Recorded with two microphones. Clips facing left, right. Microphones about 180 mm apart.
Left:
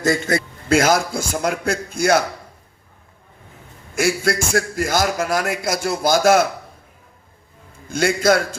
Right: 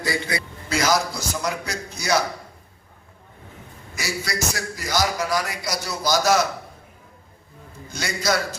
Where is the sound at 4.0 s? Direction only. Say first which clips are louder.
Left 9 dB; 55° left (ahead or behind).